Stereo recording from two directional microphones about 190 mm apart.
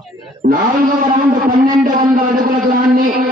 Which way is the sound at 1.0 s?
45° right (ahead or behind).